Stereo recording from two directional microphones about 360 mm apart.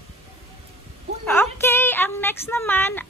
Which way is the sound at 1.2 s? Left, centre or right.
Centre.